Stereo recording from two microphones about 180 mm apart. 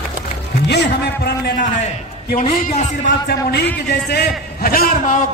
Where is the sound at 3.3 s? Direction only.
65° left (ahead or behind).